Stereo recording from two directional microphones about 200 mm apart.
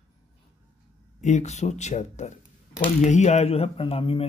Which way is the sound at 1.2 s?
35° left (ahead or behind).